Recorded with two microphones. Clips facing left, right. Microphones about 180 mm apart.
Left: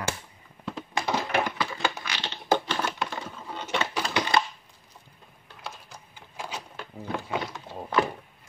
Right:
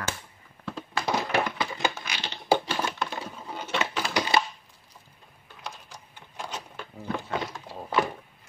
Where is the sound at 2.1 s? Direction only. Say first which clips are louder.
Right 1 dB; 10° right (ahead or behind).